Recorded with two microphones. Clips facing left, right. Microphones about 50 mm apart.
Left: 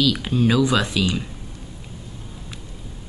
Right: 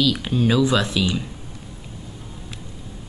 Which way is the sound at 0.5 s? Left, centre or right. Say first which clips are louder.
Right 2 dB; centre.